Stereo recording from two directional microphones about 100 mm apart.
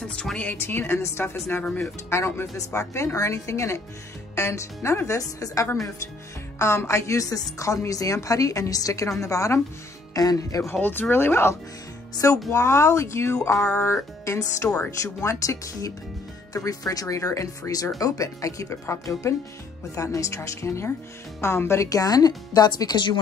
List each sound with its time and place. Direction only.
0.1 s speech: 10° left (ahead or behind); by 13.6 s 30° left (ahead or behind)
13.6 s music: 15° left (ahead or behind)
13.8 s speech: 30° left (ahead or behind); by 23.1 s 45° left (ahead or behind)